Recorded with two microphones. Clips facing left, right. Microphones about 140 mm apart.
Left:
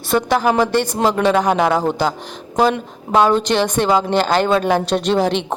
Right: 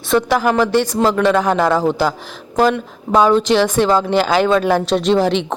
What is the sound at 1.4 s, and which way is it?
Speech, 15° left (ahead or behind).